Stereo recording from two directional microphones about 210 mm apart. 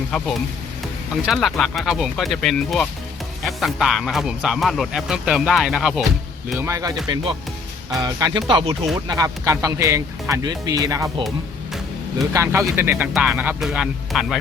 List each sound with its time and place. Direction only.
0.1 s speech: centre (ahead or behind)
6.6 s speech: 15° right (ahead or behind)
12.3 s speech: 15° right (ahead or behind)